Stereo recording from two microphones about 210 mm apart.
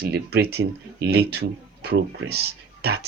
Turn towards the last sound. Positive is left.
turn(degrees=-50)  # may be behind; listen again after turning